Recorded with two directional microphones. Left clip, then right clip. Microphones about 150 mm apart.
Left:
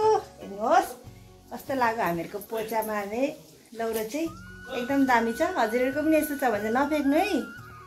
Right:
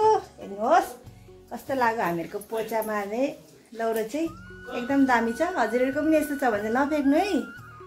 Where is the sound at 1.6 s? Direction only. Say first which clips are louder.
Right 1 dB; 10° right (ahead or behind).